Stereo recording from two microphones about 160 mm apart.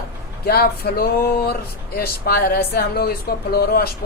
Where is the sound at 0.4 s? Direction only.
70° left (ahead or behind).